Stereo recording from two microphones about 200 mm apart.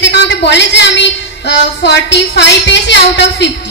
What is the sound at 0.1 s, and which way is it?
A woman's voice, 60° left (ahead or behind).